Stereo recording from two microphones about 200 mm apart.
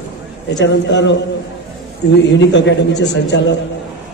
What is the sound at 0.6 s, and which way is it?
Speech, 60° left (ahead or behind).